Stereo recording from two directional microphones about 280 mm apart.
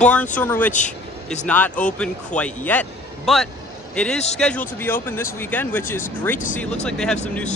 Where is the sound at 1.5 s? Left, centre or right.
Centre.